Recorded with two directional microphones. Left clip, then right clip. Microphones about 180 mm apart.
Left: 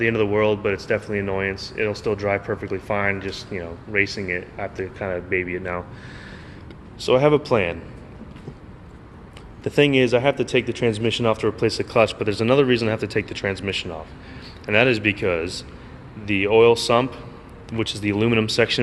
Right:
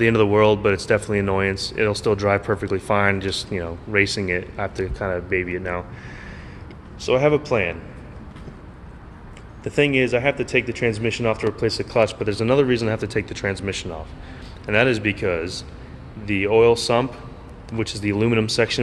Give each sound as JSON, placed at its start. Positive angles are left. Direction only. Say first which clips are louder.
{"t": 0.0, "sound": "speech", "louder": "right 3 dB", "side_deg": -40}
{"t": 4.9, "sound": "speech", "louder": "even", "side_deg": 0}
{"t": 7.0, "sound": "a man's voice", "louder": "left 1 dB", "side_deg": 40}
{"t": 9.6, "sound": "a man's voice", "louder": "left 1 dB", "side_deg": 30}